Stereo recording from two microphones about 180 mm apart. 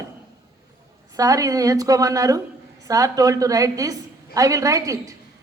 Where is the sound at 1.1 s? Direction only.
20° right (ahead or behind).